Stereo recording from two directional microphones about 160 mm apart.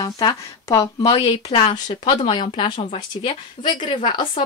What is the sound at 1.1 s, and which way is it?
Speech, 35° left (ahead or behind).